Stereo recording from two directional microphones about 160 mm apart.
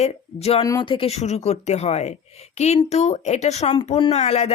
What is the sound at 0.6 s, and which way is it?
Speech, 25° left (ahead or behind).